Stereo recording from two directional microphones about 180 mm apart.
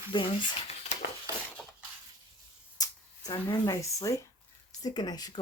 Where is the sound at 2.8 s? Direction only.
20° left (ahead or behind).